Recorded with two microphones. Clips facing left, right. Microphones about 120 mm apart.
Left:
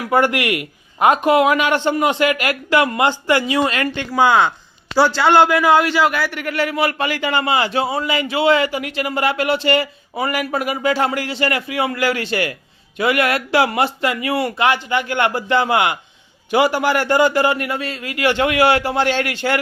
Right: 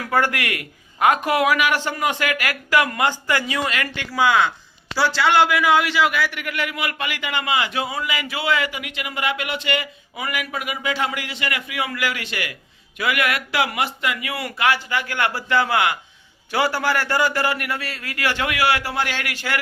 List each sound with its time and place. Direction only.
0.0 s a man's voice: 20° left (ahead or behind)